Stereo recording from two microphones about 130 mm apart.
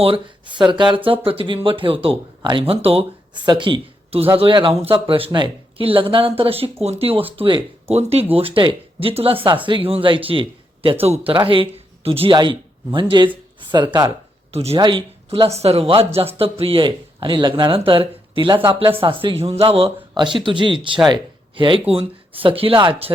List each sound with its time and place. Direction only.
0.0 s speech: 40° right (ahead or behind)
3.4 s speech: 35° right (ahead or behind)
14.5 s speech: 50° right (ahead or behind)
14.8 s speech: 40° right (ahead or behind)